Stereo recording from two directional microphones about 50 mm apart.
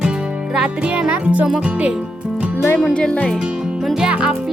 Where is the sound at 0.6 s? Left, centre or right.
Centre.